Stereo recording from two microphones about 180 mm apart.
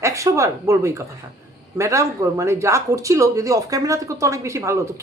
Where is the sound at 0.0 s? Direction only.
15° right (ahead or behind).